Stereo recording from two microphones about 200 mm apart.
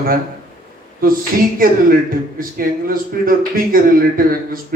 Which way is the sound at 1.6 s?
45° right (ahead or behind).